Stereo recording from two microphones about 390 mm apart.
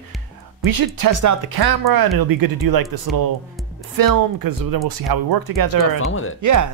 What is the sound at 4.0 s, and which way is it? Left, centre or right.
Speech, right.